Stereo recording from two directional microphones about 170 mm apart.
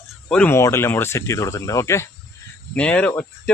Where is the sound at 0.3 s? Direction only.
10° left (ahead or behind).